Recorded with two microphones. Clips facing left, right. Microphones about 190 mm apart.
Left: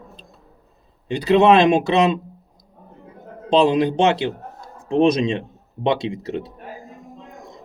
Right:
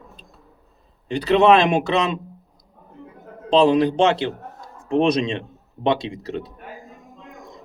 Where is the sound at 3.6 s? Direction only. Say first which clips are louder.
Even; 20° left (ahead or behind).